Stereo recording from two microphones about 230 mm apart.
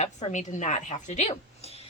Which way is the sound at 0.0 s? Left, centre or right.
Left.